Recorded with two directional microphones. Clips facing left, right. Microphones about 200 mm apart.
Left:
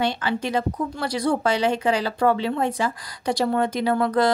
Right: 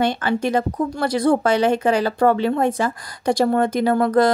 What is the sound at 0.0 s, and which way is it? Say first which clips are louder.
Speech: right 4 dB; 50° right (ahead or behind).